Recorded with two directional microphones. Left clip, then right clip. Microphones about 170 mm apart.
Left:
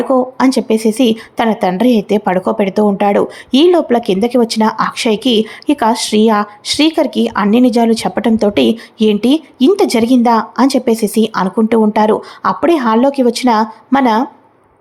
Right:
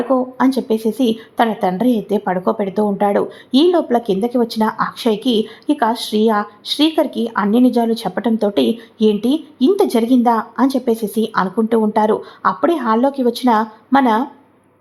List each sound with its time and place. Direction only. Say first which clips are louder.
0.0 s a woman's voice: left 4 dB; 25° left (ahead or behind)